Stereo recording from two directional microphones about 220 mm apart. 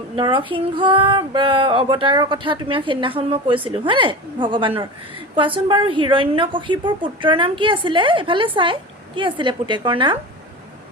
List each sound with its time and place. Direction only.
0.2 s a woman's voice: 25° right (ahead or behind)